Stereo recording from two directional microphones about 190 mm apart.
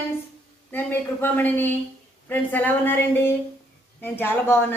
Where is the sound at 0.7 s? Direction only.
10° left (ahead or behind).